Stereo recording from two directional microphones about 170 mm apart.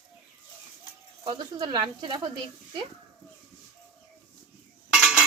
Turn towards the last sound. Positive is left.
turn(degrees=0)  # may be behind; listen again after turning